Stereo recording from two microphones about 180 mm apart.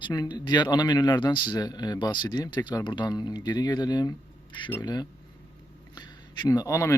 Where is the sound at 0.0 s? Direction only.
25° left (ahead or behind).